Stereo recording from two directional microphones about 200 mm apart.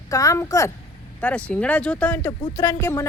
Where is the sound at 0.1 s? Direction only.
15° left (ahead or behind).